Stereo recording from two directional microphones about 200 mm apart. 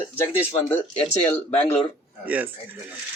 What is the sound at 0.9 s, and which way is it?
Speech, 30° left (ahead or behind).